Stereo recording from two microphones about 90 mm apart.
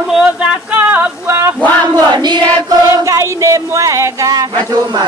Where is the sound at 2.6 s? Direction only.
35° right (ahead or behind).